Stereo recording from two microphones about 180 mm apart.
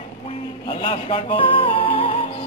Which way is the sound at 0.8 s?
30° left (ahead or behind).